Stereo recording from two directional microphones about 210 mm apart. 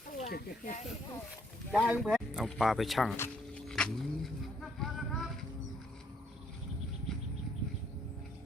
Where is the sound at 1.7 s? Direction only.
Centre (ahead or behind).